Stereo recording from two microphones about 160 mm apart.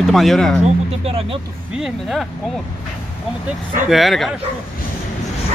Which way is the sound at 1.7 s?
Centre (ahead or behind).